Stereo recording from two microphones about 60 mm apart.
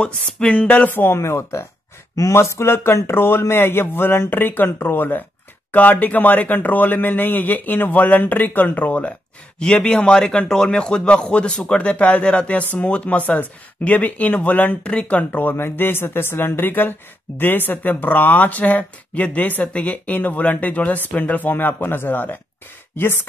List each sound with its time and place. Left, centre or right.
0.0 s music: centre
0.6 s speech: left
0.9 s speech: left
2.1 s speech: left
9.6 s music: centre
9.9 s speech: centre
15.5 s speech: left